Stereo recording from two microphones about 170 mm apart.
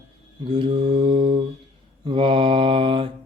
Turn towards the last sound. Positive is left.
turn(degrees=-30)  # may be behind; listen again after turning